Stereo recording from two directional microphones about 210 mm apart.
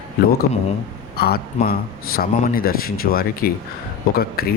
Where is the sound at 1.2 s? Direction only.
50° left (ahead or behind).